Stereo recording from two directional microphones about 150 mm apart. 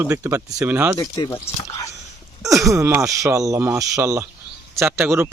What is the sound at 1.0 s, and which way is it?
Speech, 20° left (ahead or behind).